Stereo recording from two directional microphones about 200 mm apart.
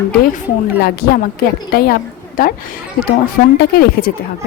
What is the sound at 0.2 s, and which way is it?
A woman's voice, 45° left (ahead or behind).